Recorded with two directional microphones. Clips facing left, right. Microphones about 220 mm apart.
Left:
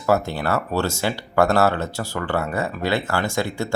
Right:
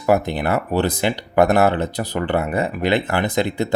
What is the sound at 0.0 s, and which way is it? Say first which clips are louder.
Speech: right 3 dB; 15° right (ahead or behind).